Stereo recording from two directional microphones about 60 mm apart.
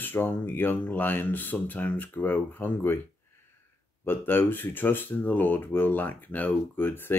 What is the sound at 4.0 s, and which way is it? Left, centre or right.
Speech, left.